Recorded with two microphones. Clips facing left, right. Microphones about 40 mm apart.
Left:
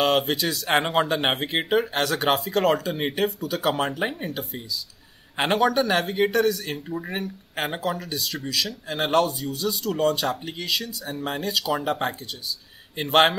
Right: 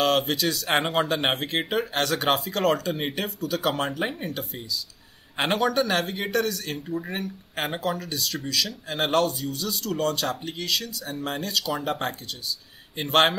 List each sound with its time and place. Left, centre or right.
0.0 s speech: centre